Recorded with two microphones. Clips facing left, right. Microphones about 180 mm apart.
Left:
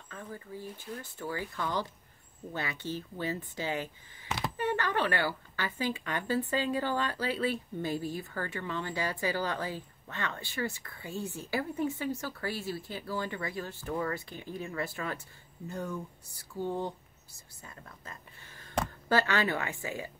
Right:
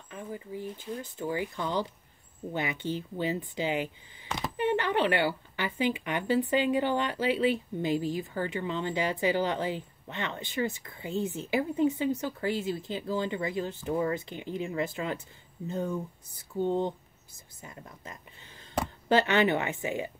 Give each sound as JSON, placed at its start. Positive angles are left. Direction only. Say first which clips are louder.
{"t": 0.1, "sound": "speech", "louder": "right 4 dB", "side_deg": -15}